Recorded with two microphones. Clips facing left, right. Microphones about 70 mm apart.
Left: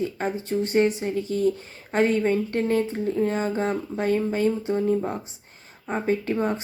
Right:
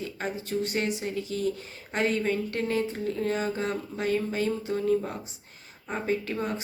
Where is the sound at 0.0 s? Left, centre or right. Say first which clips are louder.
Left 6 dB; left.